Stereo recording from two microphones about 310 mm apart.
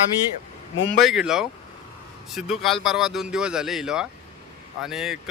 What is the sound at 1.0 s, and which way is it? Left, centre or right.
Speech, centre.